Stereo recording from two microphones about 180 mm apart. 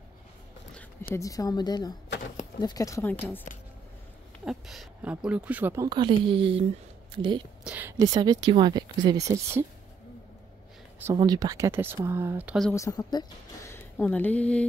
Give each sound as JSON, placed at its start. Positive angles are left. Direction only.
{"t": 1.1, "sound": "a woman's voice", "side_deg": 20}
{"t": 4.5, "sound": "speech", "side_deg": 0}
{"t": 7.6, "sound": "a sound", "side_deg": -10}
{"t": 8.0, "sound": "speech", "side_deg": -20}
{"t": 11.1, "sound": "speech", "side_deg": -20}
{"t": 12.7, "sound": "speech", "side_deg": 20}